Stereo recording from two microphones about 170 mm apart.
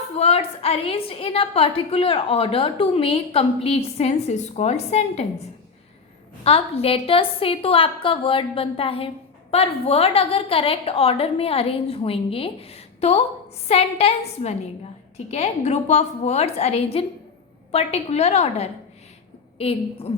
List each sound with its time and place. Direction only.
0.2 s a woman's voice: 35° left (ahead or behind)
6.4 s a woman's voice: 35° left (ahead or behind)